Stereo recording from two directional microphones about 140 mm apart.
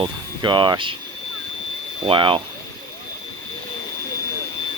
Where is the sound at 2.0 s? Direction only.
35° right (ahead or behind).